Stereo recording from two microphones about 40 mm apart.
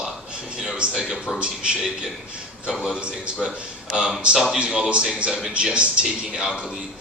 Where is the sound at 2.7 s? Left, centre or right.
Right.